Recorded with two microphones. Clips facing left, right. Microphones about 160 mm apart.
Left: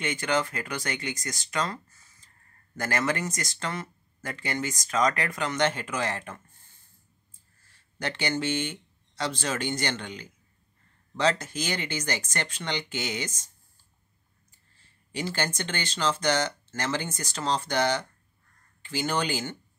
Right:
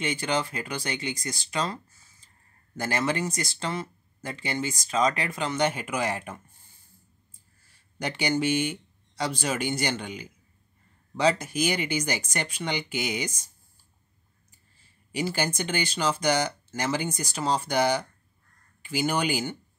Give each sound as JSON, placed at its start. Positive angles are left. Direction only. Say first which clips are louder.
{"t": 0.0, "sound": "speech", "louder": "even", "side_deg": -15}
{"t": 0.8, "sound": "speech", "louder": "right 1 dB", "side_deg": -30}
{"t": 1.2, "sound": "speech", "louder": "right 2 dB", "side_deg": -10}
{"t": 1.6, "sound": "a sound", "louder": "even", "side_deg": -10}
{"t": 3.3, "sound": "speech", "louder": "right 2 dB", "side_deg": -10}
{"t": 4.2, "sound": "speech", "louder": "right 1 dB", "side_deg": -25}
{"t": 5.5, "sound": "speech", "louder": "right 1 dB", "side_deg": -10}
{"t": 14.8, "sound": "speech", "louder": "right 3 dB", "side_deg": -10}